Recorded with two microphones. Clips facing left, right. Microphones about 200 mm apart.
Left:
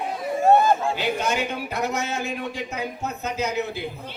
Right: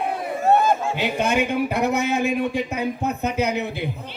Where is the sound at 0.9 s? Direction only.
60° right (ahead or behind).